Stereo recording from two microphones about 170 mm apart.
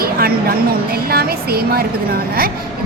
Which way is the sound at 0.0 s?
60° right (ahead or behind).